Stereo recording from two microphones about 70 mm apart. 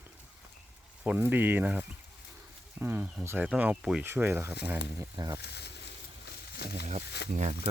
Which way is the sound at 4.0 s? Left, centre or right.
Right.